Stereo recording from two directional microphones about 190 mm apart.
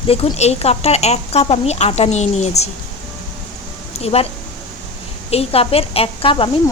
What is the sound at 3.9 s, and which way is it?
Speech, 30° left (ahead or behind).